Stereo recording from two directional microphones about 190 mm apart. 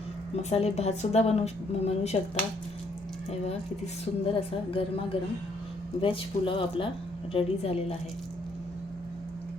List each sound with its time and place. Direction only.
0.5 s a woman's voice: 35° left (ahead or behind)
4.2 s a woman's voice: 30° left (ahead or behind)